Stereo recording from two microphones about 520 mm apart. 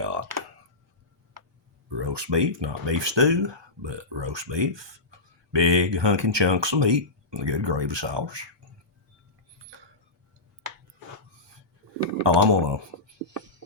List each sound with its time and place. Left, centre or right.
0.0 s computer keyboard: right
1.9 s speech: right
12.2 s speech: right